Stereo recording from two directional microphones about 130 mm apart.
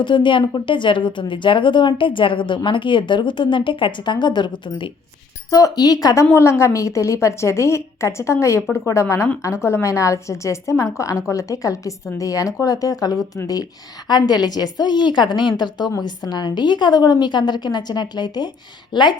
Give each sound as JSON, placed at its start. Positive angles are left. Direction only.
{"t": 0.0, "sound": "a woman's voice", "side_deg": 35}
{"t": 5.5, "sound": "a woman's voice", "side_deg": 25}